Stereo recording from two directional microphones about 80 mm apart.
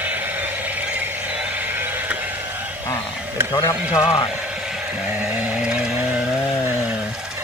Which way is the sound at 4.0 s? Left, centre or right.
Left.